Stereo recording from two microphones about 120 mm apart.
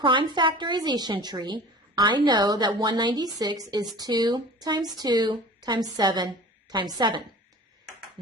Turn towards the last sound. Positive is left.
turn(degrees=-35)  # may be behind; listen again after turning